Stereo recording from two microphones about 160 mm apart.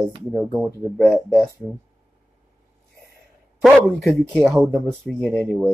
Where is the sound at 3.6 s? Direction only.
5° left (ahead or behind).